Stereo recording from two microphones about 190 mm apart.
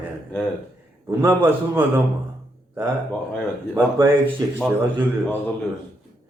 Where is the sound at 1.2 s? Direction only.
10° right (ahead or behind).